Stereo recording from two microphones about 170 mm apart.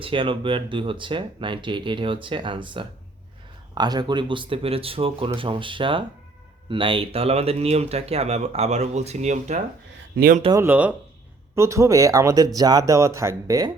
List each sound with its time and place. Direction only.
0.0 s speech: 30° right (ahead or behind); by 9.6 s 45° right (ahead or behind)
10.2 s speech: 60° right (ahead or behind)
10.5 s speech: 10° right (ahead or behind)